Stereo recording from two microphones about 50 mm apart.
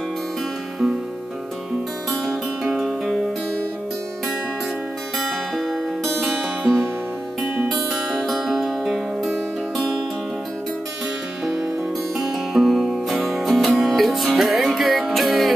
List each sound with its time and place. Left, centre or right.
2.6 s music: centre
6.2 s music: centre
11.4 s music: centre